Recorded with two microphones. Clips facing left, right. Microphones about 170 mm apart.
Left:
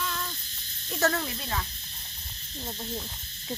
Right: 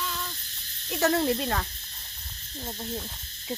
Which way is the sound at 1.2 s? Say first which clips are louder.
Right 8 dB; 55° right (ahead or behind).